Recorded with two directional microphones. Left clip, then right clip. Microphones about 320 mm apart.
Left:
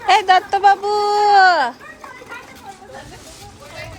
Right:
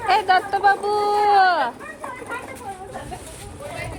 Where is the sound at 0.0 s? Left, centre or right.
Left.